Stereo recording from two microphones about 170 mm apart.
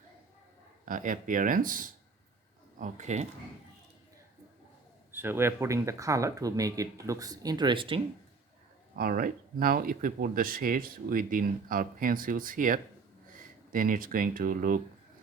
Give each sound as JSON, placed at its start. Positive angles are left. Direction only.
{"t": 0.9, "sound": "speech", "side_deg": -50}
{"t": 5.1, "sound": "speech", "side_deg": -15}
{"t": 9.0, "sound": "speech", "side_deg": -55}